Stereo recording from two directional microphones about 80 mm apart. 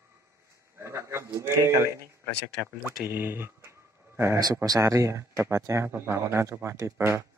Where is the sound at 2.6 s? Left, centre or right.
Centre.